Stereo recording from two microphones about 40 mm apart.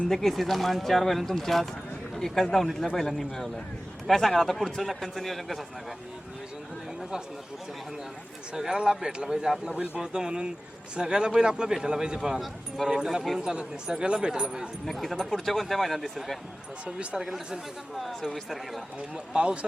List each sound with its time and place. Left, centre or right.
0.1 s speech: centre
8.5 s a man's voice: centre
12.4 s speech: centre
13.4 s speech: centre
14.8 s speech: centre
16.8 s speech: right
17.2 s speech: centre
19.3 s speech: right